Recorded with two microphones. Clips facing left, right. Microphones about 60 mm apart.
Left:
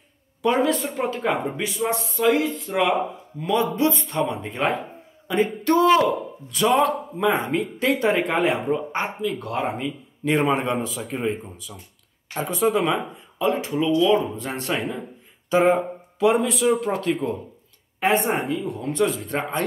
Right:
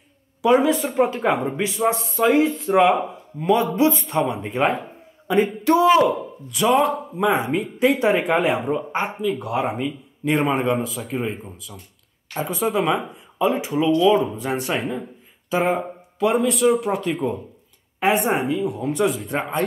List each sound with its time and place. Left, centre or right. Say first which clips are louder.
0.4 s a man's voice: right 4 dB; centre